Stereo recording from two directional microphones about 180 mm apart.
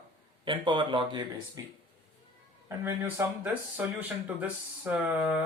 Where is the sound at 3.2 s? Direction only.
15° right (ahead or behind).